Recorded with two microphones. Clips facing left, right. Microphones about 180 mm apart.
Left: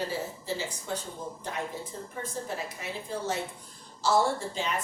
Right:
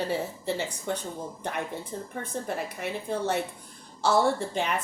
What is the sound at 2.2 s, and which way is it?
Speech, 60° right (ahead or behind).